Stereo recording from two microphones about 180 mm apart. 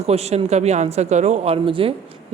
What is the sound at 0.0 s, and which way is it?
A woman's voice, 35° right (ahead or behind).